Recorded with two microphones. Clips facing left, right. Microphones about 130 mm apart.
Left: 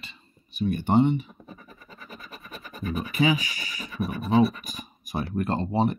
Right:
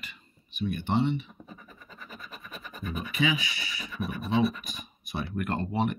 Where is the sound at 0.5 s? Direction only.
45° left (ahead or behind).